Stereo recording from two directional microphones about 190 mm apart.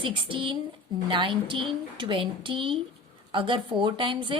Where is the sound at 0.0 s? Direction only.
25° right (ahead or behind).